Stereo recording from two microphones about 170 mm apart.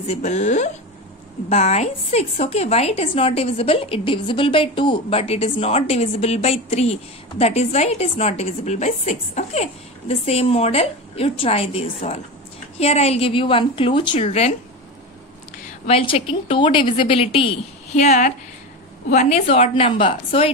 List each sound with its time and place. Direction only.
0.0 s a woman's voice: 40° left (ahead or behind)
15.9 s a woman's voice: 35° left (ahead or behind)